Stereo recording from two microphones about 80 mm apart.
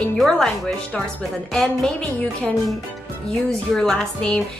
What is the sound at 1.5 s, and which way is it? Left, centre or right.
Speech, centre.